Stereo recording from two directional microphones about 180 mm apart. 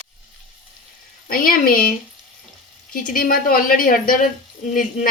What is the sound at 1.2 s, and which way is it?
Speech, 55° left (ahead or behind).